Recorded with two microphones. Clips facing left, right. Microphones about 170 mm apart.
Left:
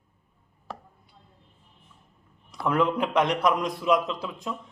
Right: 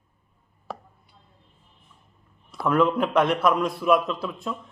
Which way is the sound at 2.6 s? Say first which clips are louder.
Right 3 dB; 20° left (ahead or behind).